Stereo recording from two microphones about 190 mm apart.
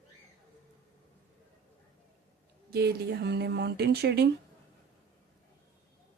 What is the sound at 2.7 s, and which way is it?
Speech, 60° right (ahead or behind).